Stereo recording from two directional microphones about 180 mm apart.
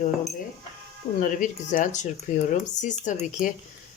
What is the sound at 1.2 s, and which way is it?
Speech, 45° left (ahead or behind).